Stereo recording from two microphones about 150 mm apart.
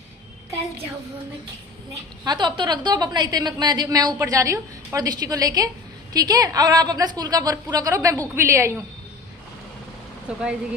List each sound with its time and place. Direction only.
2.2 s a woman's voice: 30° right (ahead or behind)
10.3 s a woman's voice: 5° right (ahead or behind)